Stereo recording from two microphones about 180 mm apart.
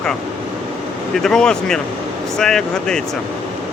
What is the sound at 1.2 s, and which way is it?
Speech, 5° left (ahead or behind).